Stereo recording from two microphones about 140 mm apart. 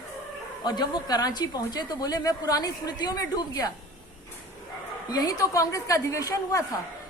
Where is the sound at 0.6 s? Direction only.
30° left (ahead or behind).